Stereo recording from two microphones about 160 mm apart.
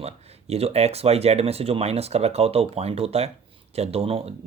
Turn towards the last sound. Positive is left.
turn(degrees=-40)  # may be behind; listen again after turning